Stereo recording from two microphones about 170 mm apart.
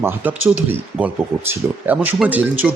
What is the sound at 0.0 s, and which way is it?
Speech, 10° right (ahead or behind).